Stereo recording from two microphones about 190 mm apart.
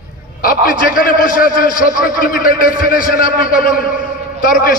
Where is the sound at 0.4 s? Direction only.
50° left (ahead or behind).